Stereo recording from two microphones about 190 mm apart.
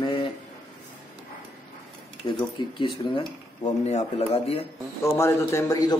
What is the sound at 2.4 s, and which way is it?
Speech, 25° left (ahead or behind).